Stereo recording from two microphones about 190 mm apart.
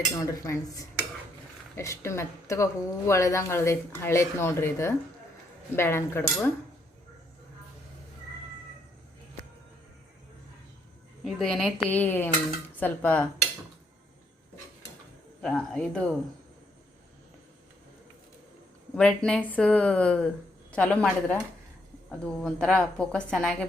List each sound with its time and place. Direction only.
0.2 s speech: 15° left (ahead or behind)
11.2 s speech: centre (ahead or behind)
15.4 s a woman's voice: 5° left (ahead or behind)
18.9 s a woman's voice: 5° left (ahead or behind)